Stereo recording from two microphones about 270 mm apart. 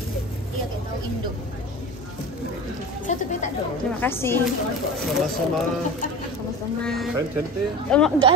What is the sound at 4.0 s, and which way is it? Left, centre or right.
Speech, centre.